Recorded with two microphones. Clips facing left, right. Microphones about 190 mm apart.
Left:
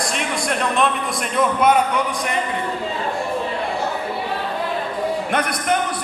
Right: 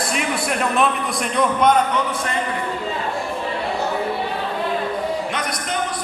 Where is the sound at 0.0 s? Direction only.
5° right (ahead or behind); by 2.4 s 15° left (ahead or behind).